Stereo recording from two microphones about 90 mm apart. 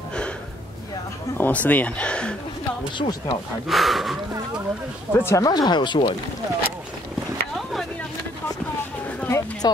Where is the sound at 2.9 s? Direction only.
55° left (ahead or behind).